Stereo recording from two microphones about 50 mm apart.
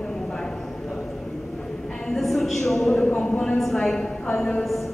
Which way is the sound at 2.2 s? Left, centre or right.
Centre.